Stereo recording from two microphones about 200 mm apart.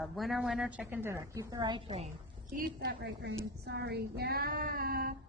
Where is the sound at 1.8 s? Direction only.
35° right (ahead or behind).